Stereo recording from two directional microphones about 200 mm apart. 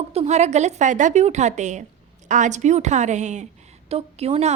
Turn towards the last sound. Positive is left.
turn(degrees=-30)  # may be behind; listen again after turning